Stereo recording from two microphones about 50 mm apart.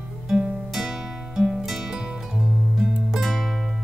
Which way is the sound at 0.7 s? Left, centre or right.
Centre.